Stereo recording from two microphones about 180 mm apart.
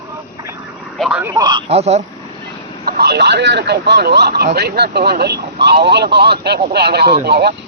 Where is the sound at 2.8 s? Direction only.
65° right (ahead or behind).